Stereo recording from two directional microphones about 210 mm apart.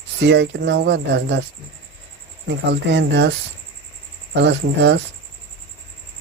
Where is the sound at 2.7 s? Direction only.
55° right (ahead or behind).